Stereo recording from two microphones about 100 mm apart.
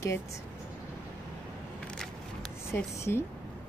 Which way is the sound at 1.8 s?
5° left (ahead or behind).